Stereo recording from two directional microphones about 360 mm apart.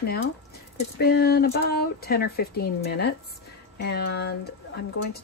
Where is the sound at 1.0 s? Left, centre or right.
Left.